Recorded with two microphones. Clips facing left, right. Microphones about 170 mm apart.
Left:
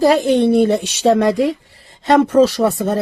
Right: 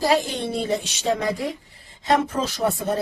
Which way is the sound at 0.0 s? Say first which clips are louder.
Left 9 dB; 55° left (ahead or behind).